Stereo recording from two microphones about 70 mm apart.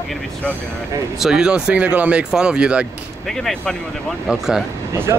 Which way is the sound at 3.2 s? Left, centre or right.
Centre.